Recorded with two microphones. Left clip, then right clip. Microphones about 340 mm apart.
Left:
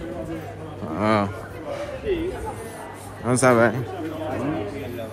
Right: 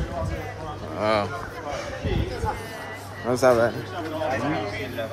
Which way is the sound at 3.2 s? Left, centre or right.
Left.